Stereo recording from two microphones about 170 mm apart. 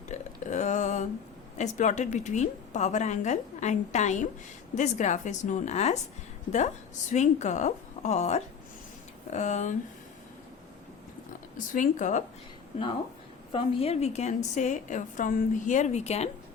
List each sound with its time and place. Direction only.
0.1 s a sound: 45° left (ahead or behind)
1.5 s a woman's voice: 45° left (ahead or behind)
7.1 s a woman's voice: 45° left (ahead or behind)
11.5 s a woman's voice: 50° left (ahead or behind)
13.5 s a woman's voice: 30° left (ahead or behind)